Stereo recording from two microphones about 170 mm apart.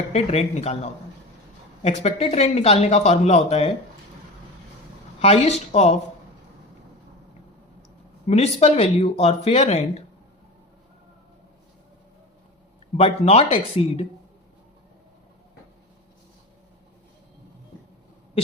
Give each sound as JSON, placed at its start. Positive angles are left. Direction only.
{"t": 0.1, "sound": "speech", "side_deg": 40}
{"t": 5.2, "sound": "speech", "side_deg": 35}
{"t": 8.3, "sound": "speech", "side_deg": 40}
{"t": 13.0, "sound": "speech", "side_deg": 35}